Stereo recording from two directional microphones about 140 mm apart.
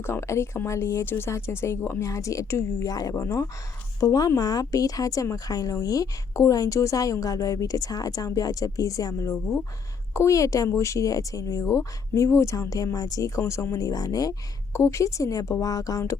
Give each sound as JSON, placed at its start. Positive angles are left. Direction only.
{"t": 0.0, "sound": "speech", "side_deg": 20}